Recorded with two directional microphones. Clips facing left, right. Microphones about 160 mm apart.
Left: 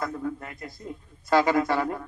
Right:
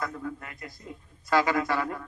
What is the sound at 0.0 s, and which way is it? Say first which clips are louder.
A man's voice: left 4 dB; 30° left (ahead or behind).